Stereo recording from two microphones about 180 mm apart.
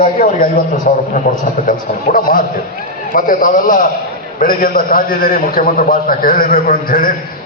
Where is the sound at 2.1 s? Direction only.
50° left (ahead or behind).